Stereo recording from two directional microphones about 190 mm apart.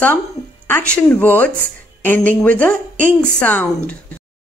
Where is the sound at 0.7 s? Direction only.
5° left (ahead or behind).